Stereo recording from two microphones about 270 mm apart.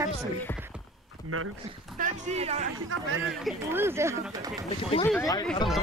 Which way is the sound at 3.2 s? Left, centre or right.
Centre.